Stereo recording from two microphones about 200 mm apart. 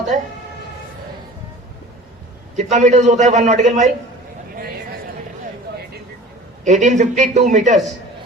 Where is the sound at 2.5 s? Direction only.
35° right (ahead or behind).